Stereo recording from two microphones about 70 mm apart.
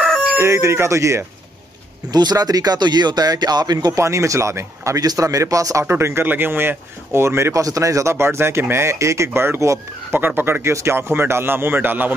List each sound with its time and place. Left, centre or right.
0.4 s speech: right
2.0 s speech: right
3.9 s speech: right
5.0 s speech: right
7.6 s speech: right
10.2 s speech: right